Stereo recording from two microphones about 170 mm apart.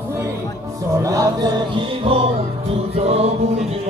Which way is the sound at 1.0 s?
20° right (ahead or behind).